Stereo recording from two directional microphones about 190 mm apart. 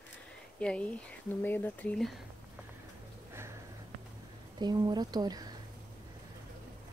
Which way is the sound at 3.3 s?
15° right (ahead or behind).